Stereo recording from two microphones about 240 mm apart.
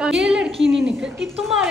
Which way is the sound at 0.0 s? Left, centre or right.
Centre.